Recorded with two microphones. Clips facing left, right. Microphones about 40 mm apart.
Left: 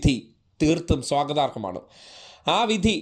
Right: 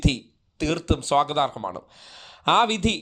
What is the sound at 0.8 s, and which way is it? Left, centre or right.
Speech, right.